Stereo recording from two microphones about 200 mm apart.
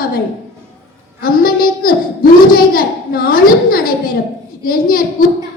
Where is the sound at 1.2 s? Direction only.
45° left (ahead or behind).